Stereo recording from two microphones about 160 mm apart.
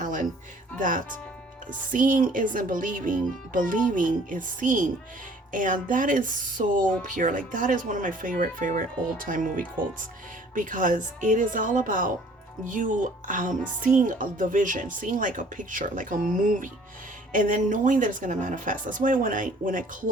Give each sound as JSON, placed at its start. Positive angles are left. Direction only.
{"t": 0.0, "sound": "music", "side_deg": -55}
{"t": 0.8, "sound": "speech", "side_deg": -55}